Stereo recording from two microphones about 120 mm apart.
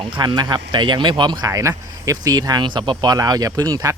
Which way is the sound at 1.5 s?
25° right (ahead or behind).